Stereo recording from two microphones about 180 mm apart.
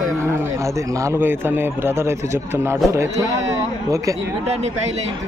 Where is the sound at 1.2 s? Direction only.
10° right (ahead or behind).